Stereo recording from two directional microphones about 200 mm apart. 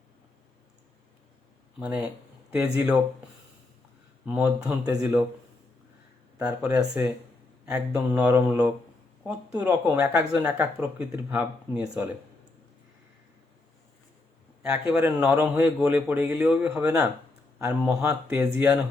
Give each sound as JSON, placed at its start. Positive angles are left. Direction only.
{"t": 1.8, "sound": "speech", "side_deg": -10}
{"t": 4.6, "sound": "speech", "side_deg": -15}
{"t": 6.6, "sound": "speech", "side_deg": -15}
{"t": 14.6, "sound": "speech", "side_deg": -10}